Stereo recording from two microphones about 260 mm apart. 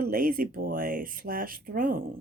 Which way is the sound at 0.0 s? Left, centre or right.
Right.